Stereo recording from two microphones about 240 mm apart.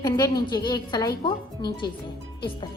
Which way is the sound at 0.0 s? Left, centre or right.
Centre.